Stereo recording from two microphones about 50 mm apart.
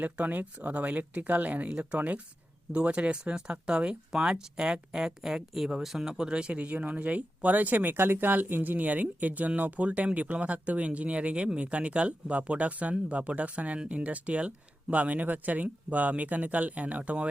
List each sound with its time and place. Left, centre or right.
0.0 s speech: right; by 6.1 s centre
6.1 s speech: centre